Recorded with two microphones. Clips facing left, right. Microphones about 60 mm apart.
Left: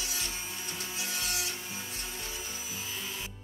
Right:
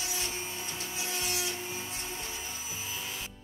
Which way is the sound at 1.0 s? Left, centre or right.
Right.